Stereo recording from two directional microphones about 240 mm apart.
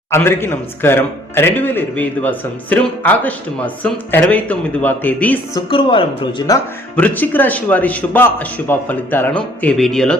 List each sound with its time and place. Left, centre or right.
0.1 s a man's voice: centre
5.5 s a woman's voice: left
6.5 s a man's voice: centre